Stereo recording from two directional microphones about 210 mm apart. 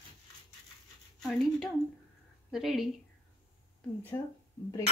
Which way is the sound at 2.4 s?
Centre (ahead or behind).